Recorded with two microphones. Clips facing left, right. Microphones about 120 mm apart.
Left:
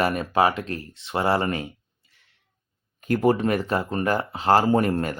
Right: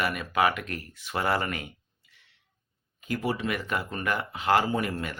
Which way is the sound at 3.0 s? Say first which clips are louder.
Left 9 dB; 50° left (ahead or behind).